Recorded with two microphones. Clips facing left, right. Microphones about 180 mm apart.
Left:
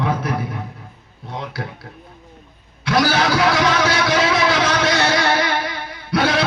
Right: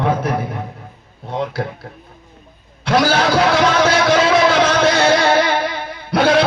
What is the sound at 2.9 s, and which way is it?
Speech, 55° right (ahead or behind).